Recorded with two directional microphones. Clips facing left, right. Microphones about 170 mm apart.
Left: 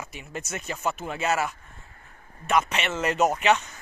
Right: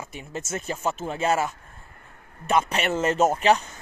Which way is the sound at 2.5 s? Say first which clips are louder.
Right 2 dB; 30° right (ahead or behind).